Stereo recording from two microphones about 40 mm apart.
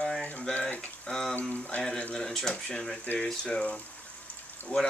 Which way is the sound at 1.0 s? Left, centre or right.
Centre.